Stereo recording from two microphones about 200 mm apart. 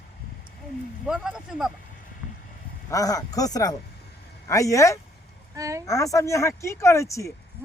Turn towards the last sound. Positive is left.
turn(degrees=15)  # may be behind; listen again after turning